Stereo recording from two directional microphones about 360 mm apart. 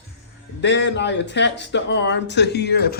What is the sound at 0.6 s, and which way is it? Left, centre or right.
Speech, left.